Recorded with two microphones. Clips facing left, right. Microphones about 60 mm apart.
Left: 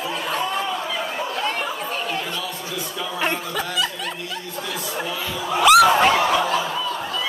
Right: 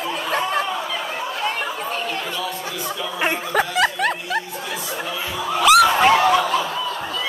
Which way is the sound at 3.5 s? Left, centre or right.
Right.